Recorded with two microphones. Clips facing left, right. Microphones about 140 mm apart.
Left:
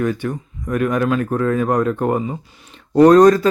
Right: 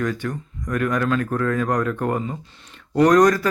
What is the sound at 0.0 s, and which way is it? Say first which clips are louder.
Speech: left 4 dB; 20° left (ahead or behind).